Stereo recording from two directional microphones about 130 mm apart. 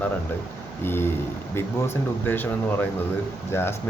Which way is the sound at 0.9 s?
15° left (ahead or behind).